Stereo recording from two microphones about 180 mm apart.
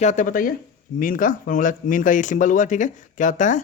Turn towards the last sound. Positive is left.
turn(degrees=45)  # may be behind; listen again after turning